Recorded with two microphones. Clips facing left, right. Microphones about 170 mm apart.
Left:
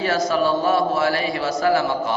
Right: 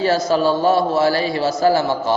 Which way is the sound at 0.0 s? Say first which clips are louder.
Right 3 dB; 30° right (ahead or behind).